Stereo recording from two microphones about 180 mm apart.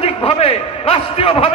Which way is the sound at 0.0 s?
35° left (ahead or behind).